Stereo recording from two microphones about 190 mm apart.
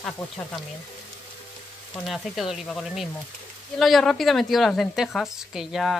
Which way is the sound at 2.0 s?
Centre (ahead or behind).